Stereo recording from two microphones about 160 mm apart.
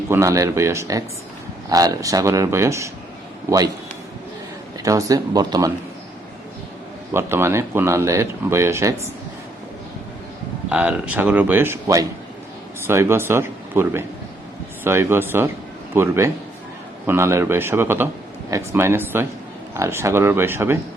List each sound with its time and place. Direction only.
0.1 s speech: 20° right (ahead or behind)
4.8 s speech: 20° right (ahead or behind)
7.1 s speech: 15° right (ahead or behind)
10.7 s speech: 10° right (ahead or behind)